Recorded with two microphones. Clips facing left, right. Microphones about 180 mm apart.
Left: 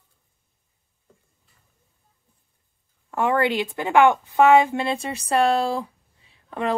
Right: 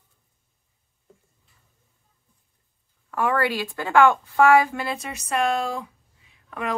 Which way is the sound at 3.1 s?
25° left (ahead or behind).